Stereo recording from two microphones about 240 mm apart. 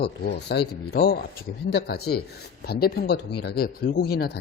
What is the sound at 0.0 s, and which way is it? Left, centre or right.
Speech, left.